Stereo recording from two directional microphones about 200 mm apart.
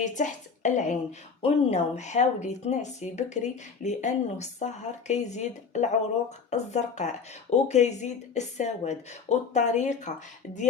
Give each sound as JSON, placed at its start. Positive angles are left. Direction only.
{"t": 0.0, "sound": "speech", "side_deg": 35}